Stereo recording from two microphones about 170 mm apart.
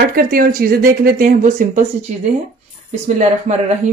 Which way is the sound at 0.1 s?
60° right (ahead or behind).